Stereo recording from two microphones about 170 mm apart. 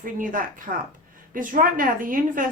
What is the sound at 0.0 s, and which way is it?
A woman's voice, 50° right (ahead or behind).